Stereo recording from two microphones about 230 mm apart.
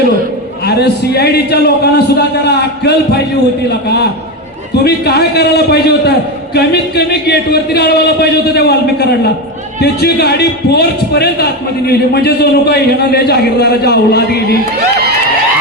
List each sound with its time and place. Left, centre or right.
0.6 s a man's voice: left